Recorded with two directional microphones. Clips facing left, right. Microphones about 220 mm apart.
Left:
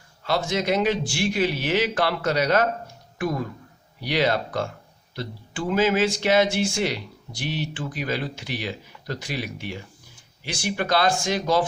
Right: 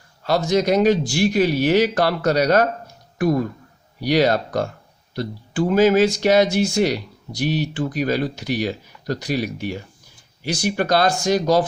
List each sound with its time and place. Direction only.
0.3 s speech: 40° right (ahead or behind)